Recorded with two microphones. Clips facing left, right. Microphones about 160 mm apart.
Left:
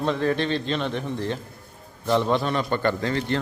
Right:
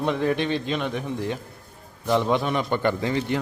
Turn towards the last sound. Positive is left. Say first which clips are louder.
# even
turn(degrees=-15)  # may be behind; listen again after turning